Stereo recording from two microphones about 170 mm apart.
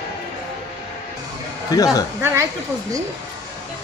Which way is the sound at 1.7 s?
20° left (ahead or behind).